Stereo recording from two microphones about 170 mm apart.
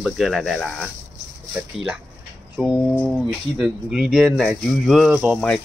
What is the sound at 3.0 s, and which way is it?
Speech, 5° right (ahead or behind).